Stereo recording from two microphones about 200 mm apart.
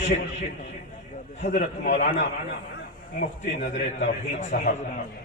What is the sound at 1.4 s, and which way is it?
Speech, 35° left (ahead or behind).